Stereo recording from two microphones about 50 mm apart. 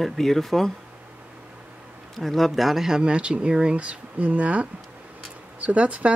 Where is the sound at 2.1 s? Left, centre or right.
Centre; by 6.1 s right.